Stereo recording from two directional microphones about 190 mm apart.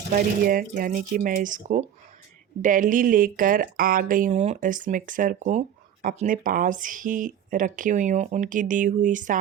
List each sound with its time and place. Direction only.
0.1 s speech: 50° right (ahead or behind)